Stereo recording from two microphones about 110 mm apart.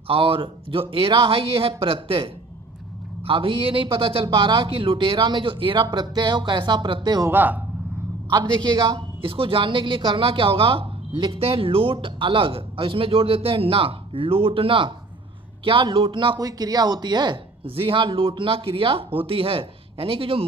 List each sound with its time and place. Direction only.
0.1 s a man's voice: 55° right (ahead or behind)
7.2 s a man's voice: 15° right (ahead or behind)
8.3 s a man's voice: 40° right (ahead or behind)
17.6 s speech: 55° right (ahead or behind)